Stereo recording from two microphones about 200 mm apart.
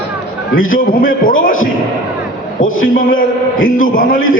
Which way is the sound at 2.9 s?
45° left (ahead or behind).